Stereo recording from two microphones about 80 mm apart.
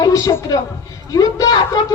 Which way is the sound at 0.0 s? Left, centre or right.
Left.